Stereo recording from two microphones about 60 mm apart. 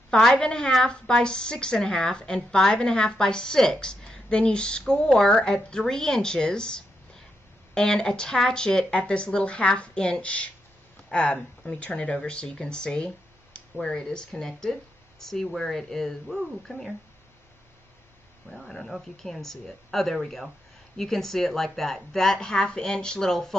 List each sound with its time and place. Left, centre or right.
0.1 s a woman's voice: centre
18.5 s a woman's voice: centre